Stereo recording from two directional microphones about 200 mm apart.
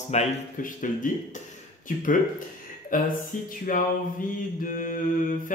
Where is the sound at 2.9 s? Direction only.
45° left (ahead or behind).